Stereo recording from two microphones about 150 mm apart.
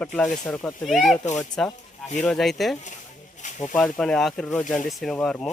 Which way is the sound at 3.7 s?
5° left (ahead or behind).